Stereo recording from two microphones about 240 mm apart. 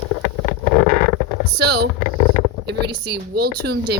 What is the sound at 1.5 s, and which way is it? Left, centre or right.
A woman's voice, right.